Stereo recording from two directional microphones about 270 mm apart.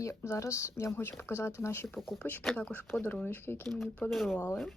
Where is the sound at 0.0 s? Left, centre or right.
Centre.